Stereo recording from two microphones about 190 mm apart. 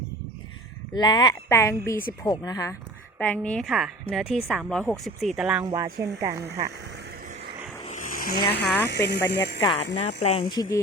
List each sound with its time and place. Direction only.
0.9 s speech: 20° left (ahead or behind)
3.2 s speech: 10° left (ahead or behind)
5.6 s speech: 20° right (ahead or behind)
7.9 s a sound: 40° left (ahead or behind)
8.6 s speech: 10° left (ahead or behind)
9.3 s speech: 60° left (ahead or behind)
9.6 s speech: 30° left (ahead or behind)
10.5 s speech: 20° left (ahead or behind)